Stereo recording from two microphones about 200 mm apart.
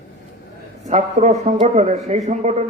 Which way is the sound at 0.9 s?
35° right (ahead or behind).